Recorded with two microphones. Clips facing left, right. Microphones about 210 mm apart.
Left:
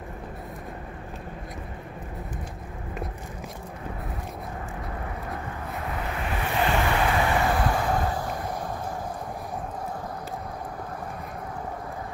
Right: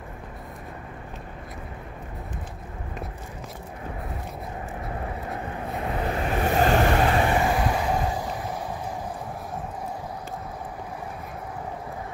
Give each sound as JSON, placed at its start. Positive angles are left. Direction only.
{"t": 5.6, "sound": "vehicle", "side_deg": -40}
{"t": 7.2, "sound": "vehicle", "side_deg": -20}